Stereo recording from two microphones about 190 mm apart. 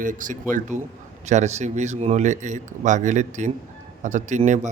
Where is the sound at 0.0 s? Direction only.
45° right (ahead or behind).